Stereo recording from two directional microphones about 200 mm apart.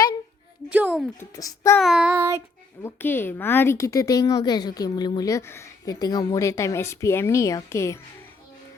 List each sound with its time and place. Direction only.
0.7 s speech: 5° right (ahead or behind)
1.2 s a woman's voice: 15° left (ahead or behind)
1.8 s child singing: 5° right (ahead or behind)
2.8 s a woman's voice: 10° left (ahead or behind)